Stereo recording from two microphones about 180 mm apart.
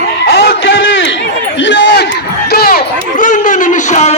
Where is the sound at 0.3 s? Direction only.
85° left.